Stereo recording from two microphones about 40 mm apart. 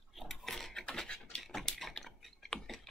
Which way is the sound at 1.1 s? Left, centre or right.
Left.